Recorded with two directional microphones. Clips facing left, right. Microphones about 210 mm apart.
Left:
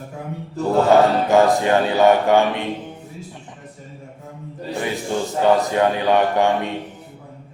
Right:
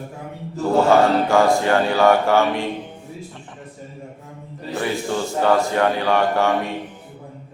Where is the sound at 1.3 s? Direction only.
20° left (ahead or behind).